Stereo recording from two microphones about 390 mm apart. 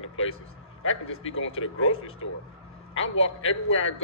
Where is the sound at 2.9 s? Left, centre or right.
Left.